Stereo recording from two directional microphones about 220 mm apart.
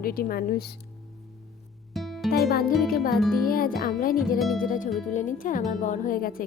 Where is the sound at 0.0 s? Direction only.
40° left (ahead or behind).